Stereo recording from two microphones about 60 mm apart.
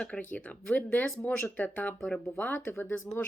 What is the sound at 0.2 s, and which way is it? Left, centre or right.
Speech, left.